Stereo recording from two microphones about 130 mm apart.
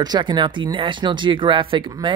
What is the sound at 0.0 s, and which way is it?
Speech, 35° right (ahead or behind).